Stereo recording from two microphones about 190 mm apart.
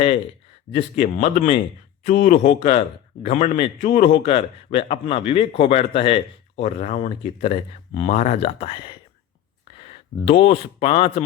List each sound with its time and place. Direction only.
0.7 s a man's voice: 30° left (ahead or behind)